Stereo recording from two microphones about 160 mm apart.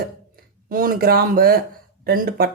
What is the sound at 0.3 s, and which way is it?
Speech, 65° right (ahead or behind).